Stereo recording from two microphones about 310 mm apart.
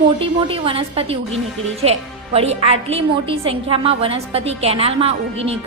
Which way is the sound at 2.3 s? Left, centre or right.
Centre.